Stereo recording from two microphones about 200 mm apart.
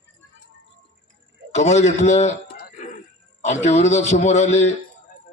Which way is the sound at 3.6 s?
35° left (ahead or behind).